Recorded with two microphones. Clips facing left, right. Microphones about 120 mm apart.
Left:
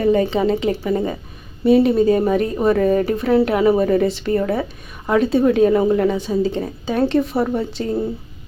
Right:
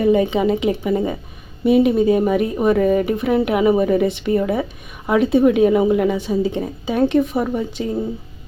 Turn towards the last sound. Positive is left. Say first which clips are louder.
# left 1 dB
turn(degrees=-15)  # may be behind; listen again after turning